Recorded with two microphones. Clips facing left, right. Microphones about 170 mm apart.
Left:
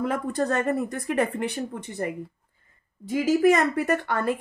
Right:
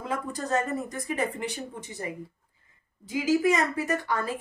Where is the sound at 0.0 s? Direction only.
60° left (ahead or behind).